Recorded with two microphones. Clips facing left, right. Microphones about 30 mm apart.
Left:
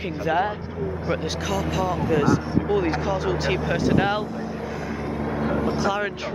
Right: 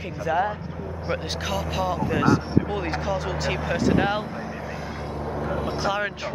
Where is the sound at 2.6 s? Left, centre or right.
Centre.